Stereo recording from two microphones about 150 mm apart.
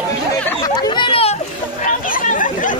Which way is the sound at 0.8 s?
30° left (ahead or behind).